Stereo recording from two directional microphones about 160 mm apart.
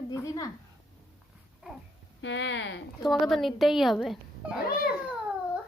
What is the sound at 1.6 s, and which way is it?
Speech, 5° right (ahead or behind).